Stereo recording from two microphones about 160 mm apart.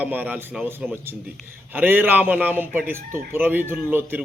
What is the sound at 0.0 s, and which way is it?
A man's voice, 10° right (ahead or behind).